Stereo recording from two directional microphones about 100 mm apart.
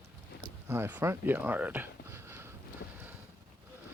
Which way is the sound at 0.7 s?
20° right (ahead or behind).